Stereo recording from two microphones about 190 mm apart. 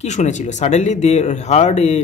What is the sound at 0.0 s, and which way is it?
Speech, 40° left (ahead or behind).